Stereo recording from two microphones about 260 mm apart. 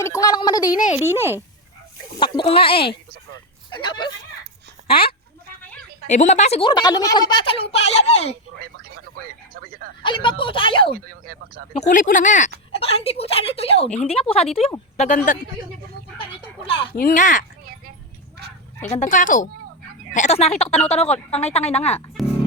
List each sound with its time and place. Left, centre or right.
0.0 s a sound: centre
0.9 s a child's voice: centre
2.1 s speech: centre
6.1 s a woman's voice: left
9.5 s a sound: right
10.0 s a woman's voice: centre
10.9 s speech: right
11.7 s a woman's voice: left
16.4 s a woman's voice: left
18.4 s a sound: right
18.9 s a woman's voice: left